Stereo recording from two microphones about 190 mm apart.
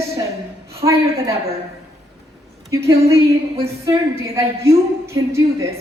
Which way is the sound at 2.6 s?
15° right (ahead or behind).